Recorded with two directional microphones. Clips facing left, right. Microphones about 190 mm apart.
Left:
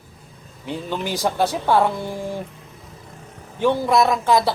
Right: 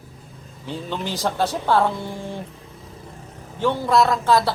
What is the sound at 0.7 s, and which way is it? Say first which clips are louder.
Speech: left 2 dB; 15° left (ahead or behind).